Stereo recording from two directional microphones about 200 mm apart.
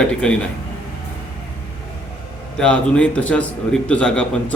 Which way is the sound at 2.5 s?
5° left (ahead or behind).